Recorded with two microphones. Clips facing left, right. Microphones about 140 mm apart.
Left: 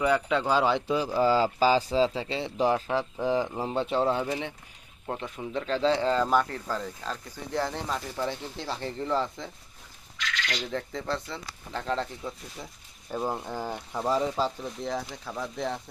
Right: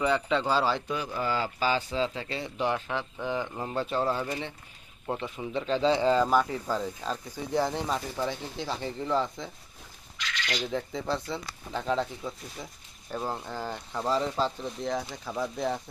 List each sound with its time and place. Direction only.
0.0 s speech: 5° left (ahead or behind)
0.9 s speech: 30° left (ahead or behind); by 4.5 s 15° left (ahead or behind)
5.1 s speech: centre (ahead or behind)
8.1 s speech: 5° right (ahead or behind)
10.5 s speech: 5° right (ahead or behind)
13.1 s speech: 15° left (ahead or behind); by 15.8 s 5° right (ahead or behind)